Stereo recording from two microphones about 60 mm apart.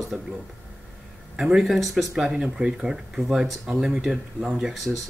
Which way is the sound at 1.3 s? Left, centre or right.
Centre.